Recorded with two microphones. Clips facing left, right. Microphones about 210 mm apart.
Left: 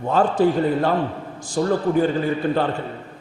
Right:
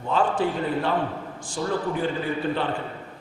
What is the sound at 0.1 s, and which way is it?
A man's voice, 40° left (ahead or behind).